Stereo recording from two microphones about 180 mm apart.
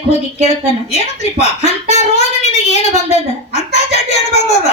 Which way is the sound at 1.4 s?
35° left (ahead or behind).